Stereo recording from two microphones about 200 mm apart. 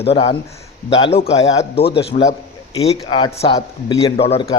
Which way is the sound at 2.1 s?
40° left (ahead or behind).